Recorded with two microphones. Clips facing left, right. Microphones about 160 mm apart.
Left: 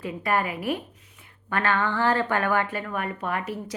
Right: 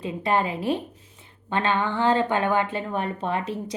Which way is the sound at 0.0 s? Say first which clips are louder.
Right 2 dB; 20° right (ahead or behind).